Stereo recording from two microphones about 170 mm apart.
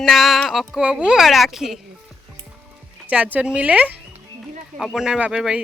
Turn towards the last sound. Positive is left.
turn(degrees=-5)  # may be behind; listen again after turning